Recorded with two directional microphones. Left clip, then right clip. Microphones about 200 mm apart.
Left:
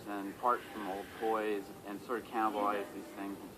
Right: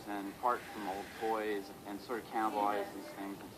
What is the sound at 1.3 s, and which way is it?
Speech, 30° left (ahead or behind).